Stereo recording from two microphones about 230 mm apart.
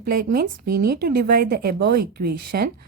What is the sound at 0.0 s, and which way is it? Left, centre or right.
A woman's voice, right.